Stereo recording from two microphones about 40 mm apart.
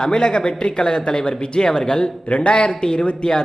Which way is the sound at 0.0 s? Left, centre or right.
Centre.